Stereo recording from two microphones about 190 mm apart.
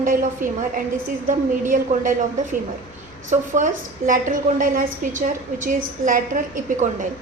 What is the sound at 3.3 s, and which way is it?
A woman's voice, 45° right (ahead or behind).